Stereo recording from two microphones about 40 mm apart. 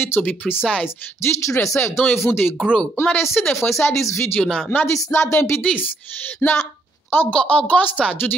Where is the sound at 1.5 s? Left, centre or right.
Left.